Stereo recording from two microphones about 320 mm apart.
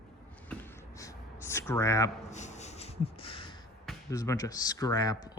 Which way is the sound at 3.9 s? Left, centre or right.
Centre.